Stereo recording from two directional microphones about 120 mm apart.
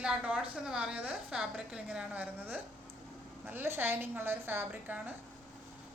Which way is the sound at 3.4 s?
15° right (ahead or behind).